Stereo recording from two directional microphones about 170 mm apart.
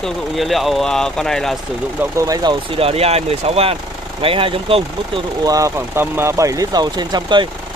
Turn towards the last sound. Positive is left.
turn(degrees=-25)  # may be behind; listen again after turning